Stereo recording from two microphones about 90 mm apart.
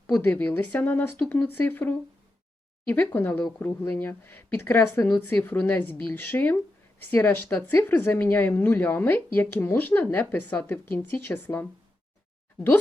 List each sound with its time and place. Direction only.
0.1 s speech: 20° left (ahead or behind)